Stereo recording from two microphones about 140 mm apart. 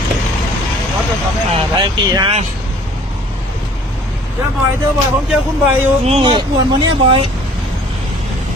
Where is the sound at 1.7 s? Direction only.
35° right (ahead or behind).